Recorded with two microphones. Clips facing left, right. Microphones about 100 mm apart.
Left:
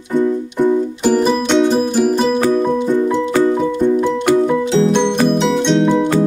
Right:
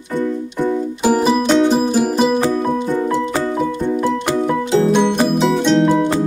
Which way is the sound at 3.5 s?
5° right (ahead or behind).